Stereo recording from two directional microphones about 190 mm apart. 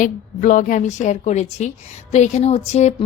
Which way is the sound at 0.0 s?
45° left (ahead or behind).